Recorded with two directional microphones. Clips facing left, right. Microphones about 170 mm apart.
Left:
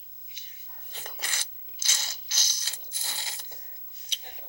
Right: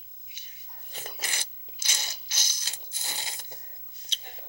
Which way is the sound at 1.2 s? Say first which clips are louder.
Right 2 dB; 15° right (ahead or behind).